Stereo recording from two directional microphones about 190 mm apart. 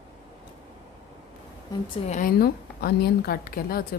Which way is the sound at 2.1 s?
50° left (ahead or behind).